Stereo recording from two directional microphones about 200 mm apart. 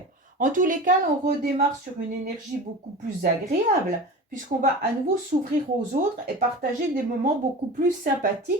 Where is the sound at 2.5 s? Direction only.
40° right (ahead or behind).